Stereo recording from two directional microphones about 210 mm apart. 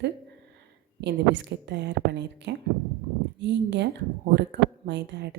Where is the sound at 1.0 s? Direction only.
55° right (ahead or behind).